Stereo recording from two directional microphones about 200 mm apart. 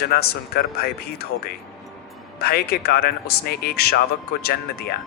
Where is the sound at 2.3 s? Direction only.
50° left (ahead or behind).